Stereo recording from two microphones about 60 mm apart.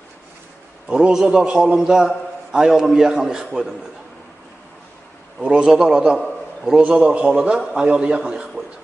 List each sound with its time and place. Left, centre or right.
0.8 s a man's voice: centre
5.4 s a man's voice: centre